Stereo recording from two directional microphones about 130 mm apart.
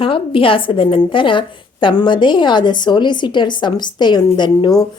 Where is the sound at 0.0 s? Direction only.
40° left (ahead or behind).